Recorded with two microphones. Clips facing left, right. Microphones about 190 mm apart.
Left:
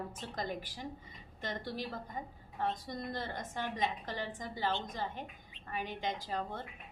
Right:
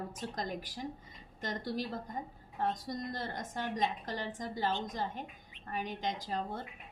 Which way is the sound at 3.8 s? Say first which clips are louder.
Right 2 dB; 40° right (ahead or behind).